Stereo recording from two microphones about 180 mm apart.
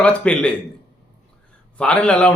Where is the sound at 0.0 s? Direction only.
5° left (ahead or behind).